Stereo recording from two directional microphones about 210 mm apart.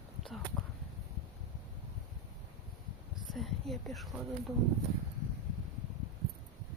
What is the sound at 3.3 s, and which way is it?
Speech, centre (ahead or behind).